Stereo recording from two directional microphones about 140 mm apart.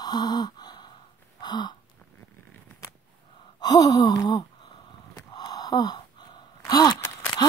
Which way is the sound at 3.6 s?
30° left (ahead or behind).